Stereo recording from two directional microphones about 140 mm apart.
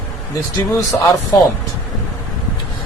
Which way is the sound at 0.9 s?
10° left (ahead or behind).